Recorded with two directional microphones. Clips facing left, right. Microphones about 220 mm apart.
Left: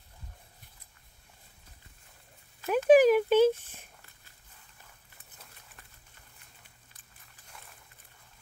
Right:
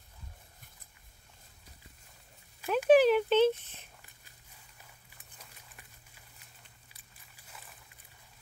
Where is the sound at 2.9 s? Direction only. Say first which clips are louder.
Left 3 dB; 10° left (ahead or behind).